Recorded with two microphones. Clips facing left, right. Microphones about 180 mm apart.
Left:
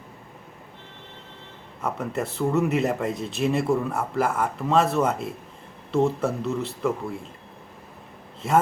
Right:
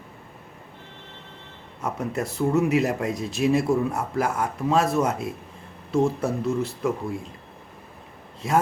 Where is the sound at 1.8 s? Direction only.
Centre (ahead or behind).